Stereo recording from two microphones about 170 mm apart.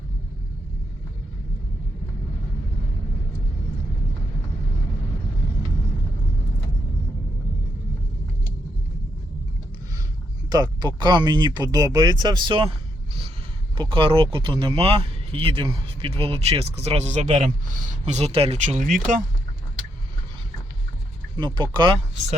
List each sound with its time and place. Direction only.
10.5 s speech: 25° right (ahead or behind)
13.7 s speech: 30° right (ahead or behind); by 18.9 s 50° right (ahead or behind)
21.3 s speech: 25° right (ahead or behind)